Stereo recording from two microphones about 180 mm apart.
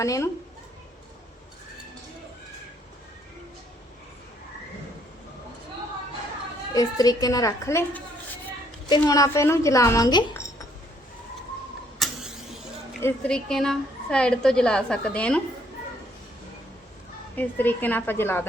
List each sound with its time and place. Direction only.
0.0 s a child's voice: 15° left (ahead or behind)
6.7 s a woman's voice: 20° left (ahead or behind)
9.0 s a child's voice: 20° left (ahead or behind)
11.9 s vehicle: centre (ahead or behind)
13.0 s a woman's voice: 10° left (ahead or behind)
17.3 s a child's voice: 10° left (ahead or behind)